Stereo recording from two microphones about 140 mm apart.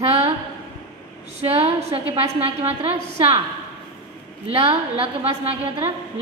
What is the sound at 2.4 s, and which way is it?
Speech, 50° right (ahead or behind).